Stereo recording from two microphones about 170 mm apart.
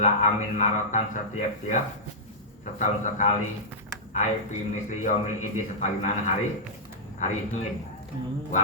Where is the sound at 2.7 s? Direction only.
45° left (ahead or behind).